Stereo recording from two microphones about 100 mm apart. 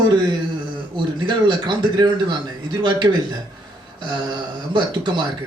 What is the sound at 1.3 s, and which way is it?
Speech, 50° right (ahead or behind).